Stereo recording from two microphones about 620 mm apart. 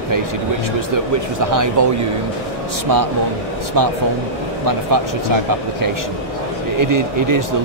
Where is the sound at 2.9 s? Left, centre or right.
Right.